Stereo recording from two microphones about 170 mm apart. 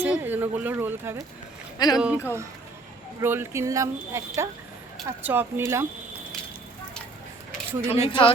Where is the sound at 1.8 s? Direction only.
25° left (ahead or behind).